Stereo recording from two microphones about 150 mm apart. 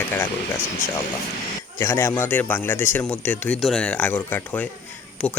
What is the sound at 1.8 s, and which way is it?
Speech, 20° left (ahead or behind).